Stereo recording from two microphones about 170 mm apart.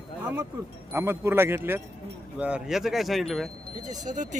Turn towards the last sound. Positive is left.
turn(degrees=-45)  # may be behind; listen again after turning